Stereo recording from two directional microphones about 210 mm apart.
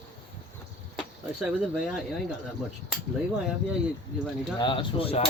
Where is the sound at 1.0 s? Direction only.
5° right (ahead or behind).